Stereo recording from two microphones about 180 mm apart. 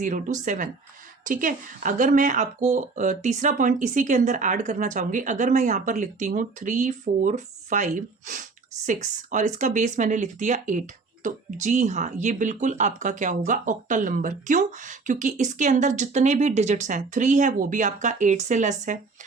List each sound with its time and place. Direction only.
0.0 s speech: 45° right (ahead or behind)